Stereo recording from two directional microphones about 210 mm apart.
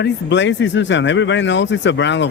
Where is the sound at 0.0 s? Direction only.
55° left (ahead or behind).